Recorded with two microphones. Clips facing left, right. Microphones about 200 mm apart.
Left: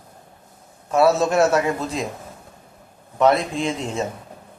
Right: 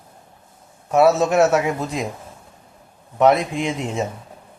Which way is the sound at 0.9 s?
20° right (ahead or behind).